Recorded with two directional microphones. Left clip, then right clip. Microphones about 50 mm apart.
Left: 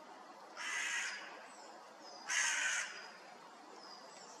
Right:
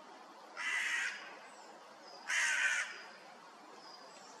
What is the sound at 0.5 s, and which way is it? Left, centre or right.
Crow, right.